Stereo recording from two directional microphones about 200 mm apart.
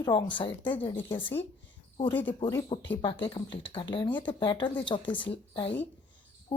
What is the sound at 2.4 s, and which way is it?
A woman's voice, 25° left (ahead or behind).